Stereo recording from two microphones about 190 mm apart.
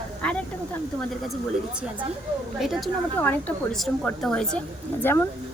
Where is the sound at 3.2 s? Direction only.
10° left (ahead or behind).